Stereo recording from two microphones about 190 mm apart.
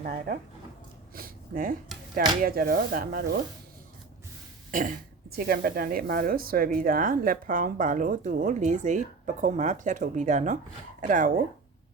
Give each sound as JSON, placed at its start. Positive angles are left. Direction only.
{"t": 0.0, "sound": "speech", "side_deg": -50}
{"t": 4.7, "sound": "cough", "side_deg": -45}
{"t": 5.4, "sound": "speech", "side_deg": -55}